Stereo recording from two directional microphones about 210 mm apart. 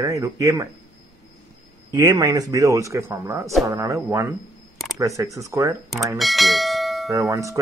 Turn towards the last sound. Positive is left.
turn(degrees=-15)  # may be behind; listen again after turning